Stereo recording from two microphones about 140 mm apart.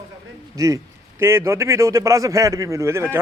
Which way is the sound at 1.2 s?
20° right (ahead or behind).